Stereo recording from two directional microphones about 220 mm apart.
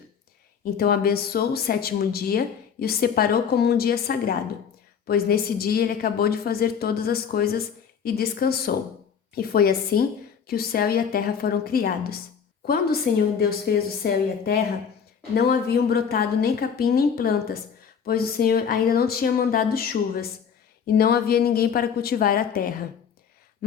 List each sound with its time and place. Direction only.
0.6 s speech: 45° left (ahead or behind)